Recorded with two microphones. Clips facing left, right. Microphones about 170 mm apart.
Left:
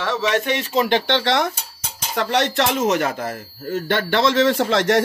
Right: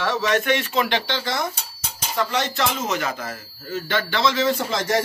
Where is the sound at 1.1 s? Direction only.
75° left (ahead or behind).